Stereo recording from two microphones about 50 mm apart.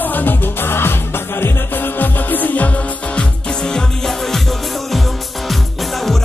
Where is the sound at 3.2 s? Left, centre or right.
Centre.